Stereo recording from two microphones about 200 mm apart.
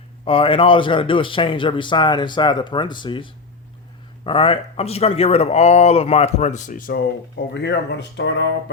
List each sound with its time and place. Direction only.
0.3 s a man's voice: 25° left (ahead or behind); by 8.7 s 60° left (ahead or behind)